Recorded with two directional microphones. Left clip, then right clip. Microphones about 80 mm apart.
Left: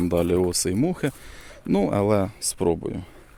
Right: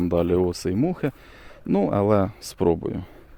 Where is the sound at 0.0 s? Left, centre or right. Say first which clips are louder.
Even; left.